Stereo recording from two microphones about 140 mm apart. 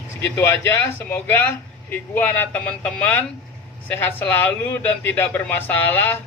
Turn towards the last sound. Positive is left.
turn(degrees=15)  # may be behind; listen again after turning